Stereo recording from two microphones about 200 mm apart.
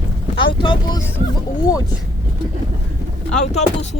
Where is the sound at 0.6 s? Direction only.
25° left (ahead or behind).